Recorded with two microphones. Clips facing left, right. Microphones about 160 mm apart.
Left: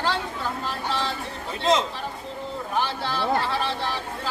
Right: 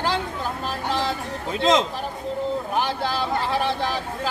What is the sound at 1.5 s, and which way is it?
Speech, 90° right.